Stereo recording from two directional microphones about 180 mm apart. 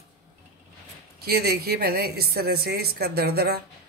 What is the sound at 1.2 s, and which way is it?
Speech, 60° right (ahead or behind).